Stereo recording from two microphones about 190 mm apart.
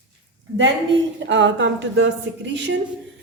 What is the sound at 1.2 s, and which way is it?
A woman's voice, 75° right (ahead or behind).